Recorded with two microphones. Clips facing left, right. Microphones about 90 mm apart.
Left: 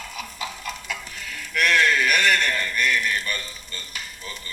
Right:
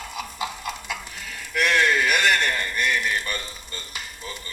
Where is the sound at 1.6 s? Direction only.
15° right (ahead or behind).